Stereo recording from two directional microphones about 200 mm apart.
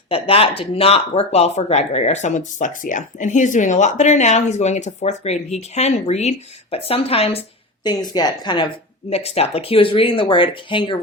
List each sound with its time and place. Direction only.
0.1 s speech: 30° left (ahead or behind)